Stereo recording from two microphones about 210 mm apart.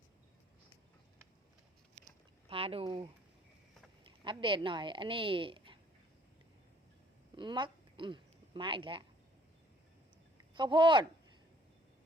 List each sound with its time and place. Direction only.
2.5 s speech: 25° right (ahead or behind)
4.2 s speech: 25° right (ahead or behind)
7.3 s a woman's voice: 20° right (ahead or behind)
10.5 s speech: 20° right (ahead or behind)